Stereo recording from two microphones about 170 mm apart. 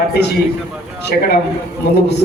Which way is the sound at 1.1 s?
55° left (ahead or behind).